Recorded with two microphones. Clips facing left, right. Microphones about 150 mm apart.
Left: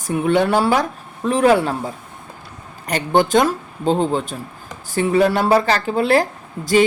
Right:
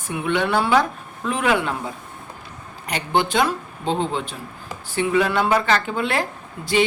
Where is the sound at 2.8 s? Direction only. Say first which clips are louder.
Left 5 dB; 45° left (ahead or behind).